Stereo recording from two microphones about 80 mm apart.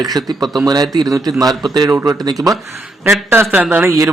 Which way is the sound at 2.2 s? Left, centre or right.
Right.